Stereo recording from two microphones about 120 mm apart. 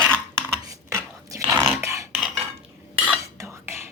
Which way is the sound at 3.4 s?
20° right (ahead or behind).